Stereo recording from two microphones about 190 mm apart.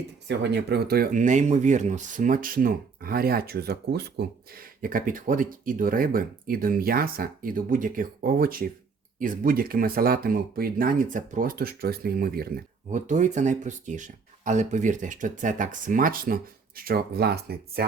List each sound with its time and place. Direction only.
0.3 s speech: 60° right (ahead or behind)